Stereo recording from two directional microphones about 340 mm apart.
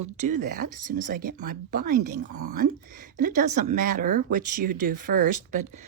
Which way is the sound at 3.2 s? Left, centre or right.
Right.